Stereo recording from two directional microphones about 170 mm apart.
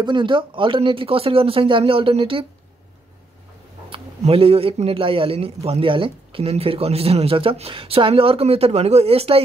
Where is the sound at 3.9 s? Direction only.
35° right (ahead or behind).